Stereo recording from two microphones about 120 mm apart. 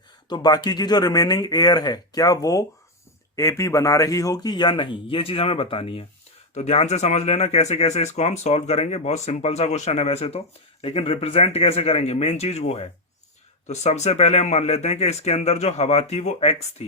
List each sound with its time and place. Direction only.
0.3 s speech: 35° left (ahead or behind); by 6.1 s 50° left (ahead or behind)
6.5 s speech: 65° left (ahead or behind)